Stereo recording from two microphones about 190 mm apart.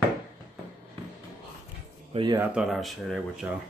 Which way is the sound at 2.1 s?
25° right (ahead or behind).